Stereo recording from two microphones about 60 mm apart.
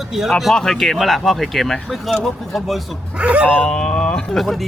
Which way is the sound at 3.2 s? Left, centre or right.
Right.